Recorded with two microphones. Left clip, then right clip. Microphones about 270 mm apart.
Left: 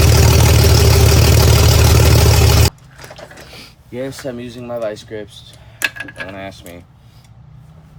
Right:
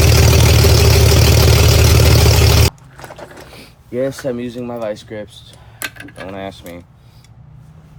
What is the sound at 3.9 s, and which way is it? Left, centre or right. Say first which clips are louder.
Speech: right 5 dB; centre.